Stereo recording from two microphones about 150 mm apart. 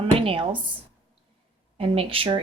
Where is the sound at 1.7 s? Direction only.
40° right (ahead or behind).